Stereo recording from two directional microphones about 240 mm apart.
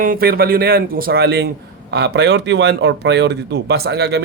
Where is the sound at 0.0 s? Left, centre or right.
Right.